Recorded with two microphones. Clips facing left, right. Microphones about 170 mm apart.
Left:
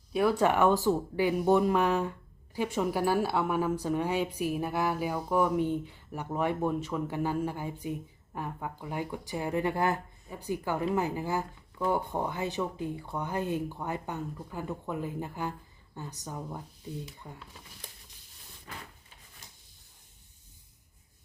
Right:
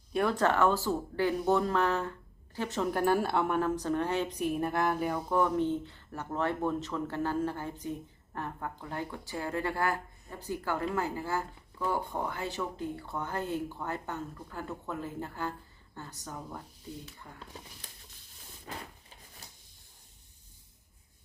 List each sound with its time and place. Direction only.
0.1 s a woman's voice: 5° left (ahead or behind); by 17.4 s 20° left (ahead or behind)